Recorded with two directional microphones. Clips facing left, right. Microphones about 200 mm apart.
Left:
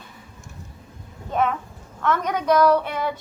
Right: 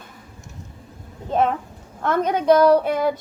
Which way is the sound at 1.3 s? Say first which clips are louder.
Right 3 dB; 30° right (ahead or behind).